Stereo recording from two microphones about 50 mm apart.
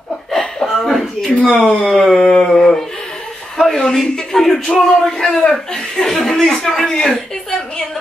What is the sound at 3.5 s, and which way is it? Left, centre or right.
A man's voice, centre.